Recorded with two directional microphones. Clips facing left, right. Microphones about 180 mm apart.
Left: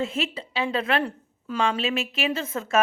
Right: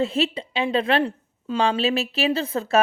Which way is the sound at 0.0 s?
30° right (ahead or behind).